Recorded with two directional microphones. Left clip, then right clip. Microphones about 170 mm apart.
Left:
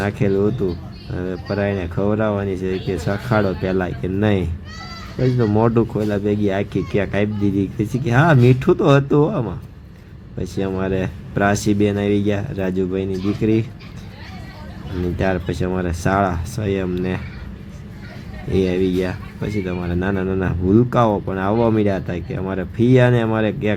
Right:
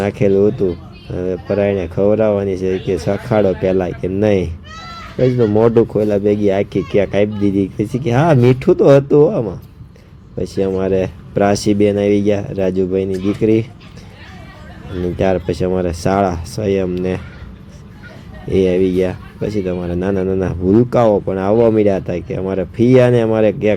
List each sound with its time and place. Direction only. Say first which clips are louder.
0.0 s speech: right 6 dB; 25° right (ahead or behind)
15.2 s speech: right 6 dB; 25° right (ahead or behind)
18.5 s speech: right 5 dB; 25° right (ahead or behind)